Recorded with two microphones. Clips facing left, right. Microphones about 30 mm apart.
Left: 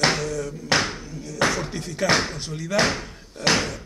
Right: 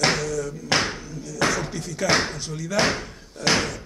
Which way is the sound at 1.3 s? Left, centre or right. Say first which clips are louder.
Left 1 dB; left.